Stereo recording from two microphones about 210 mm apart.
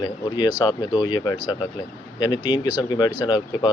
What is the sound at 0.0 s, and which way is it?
A man's voice, 20° left (ahead or behind).